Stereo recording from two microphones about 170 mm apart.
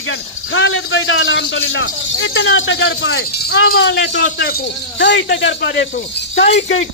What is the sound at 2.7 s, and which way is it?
Speech, 90° left.